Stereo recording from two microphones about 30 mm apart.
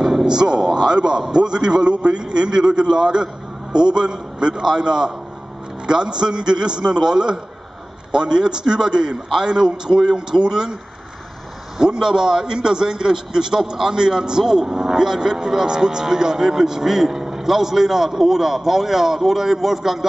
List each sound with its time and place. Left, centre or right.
0.3 s a man's voice: right
11.8 s a man's voice: right